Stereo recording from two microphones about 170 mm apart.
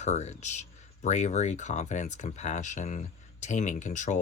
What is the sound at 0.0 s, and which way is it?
Speech, 40° left (ahead or behind).